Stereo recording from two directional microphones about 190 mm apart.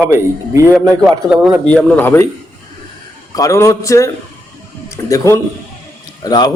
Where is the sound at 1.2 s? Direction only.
5° right (ahead or behind).